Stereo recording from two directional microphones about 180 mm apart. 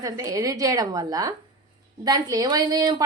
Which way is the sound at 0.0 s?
20° right (ahead or behind).